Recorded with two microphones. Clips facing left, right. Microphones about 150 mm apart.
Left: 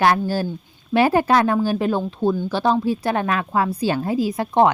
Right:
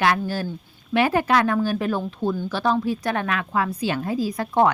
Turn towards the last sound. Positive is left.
turn(degrees=25)  # may be behind; listen again after turning